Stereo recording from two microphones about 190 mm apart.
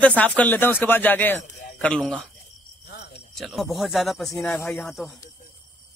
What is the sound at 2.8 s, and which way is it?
Cricket, 60° left (ahead or behind).